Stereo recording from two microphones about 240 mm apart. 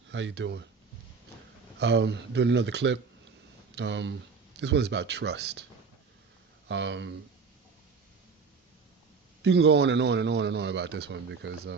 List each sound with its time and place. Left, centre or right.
0.1 s a man's voice: right
1.8 s a man's voice: right
6.7 s a man's voice: right
9.4 s a man's voice: right